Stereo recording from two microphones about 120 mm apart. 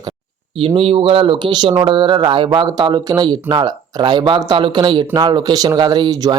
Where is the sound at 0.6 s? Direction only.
45° right (ahead or behind).